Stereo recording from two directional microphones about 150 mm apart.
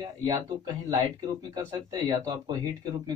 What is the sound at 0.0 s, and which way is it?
Speech, 25° right (ahead or behind).